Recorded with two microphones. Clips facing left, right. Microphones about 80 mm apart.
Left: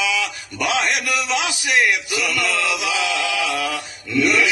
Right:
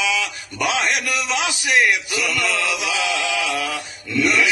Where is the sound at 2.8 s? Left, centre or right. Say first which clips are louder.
Left 1 dB; right.